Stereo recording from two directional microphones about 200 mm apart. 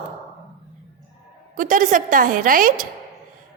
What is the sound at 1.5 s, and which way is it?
A woman's voice, 40° right (ahead or behind).